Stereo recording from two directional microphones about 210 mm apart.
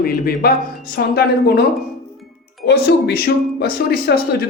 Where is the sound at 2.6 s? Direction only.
50° left (ahead or behind).